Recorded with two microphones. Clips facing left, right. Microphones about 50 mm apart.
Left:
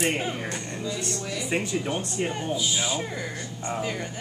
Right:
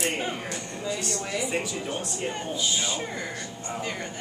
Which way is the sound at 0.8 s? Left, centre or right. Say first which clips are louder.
Right 2 dB; right.